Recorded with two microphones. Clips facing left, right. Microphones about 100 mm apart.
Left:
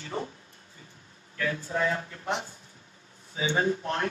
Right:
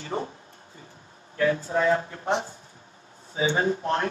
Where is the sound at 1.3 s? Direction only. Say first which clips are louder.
Right 7 dB; 30° right (ahead or behind).